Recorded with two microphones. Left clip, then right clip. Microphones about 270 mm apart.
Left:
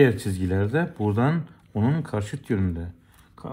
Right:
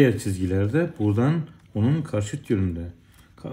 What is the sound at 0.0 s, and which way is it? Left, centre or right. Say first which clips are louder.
Speech: left 1 dB; centre.